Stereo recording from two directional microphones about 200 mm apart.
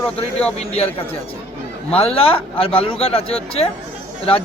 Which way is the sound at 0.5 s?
30° left (ahead or behind).